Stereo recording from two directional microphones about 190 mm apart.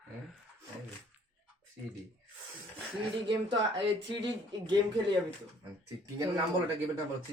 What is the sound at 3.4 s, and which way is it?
Speech, 30° right (ahead or behind).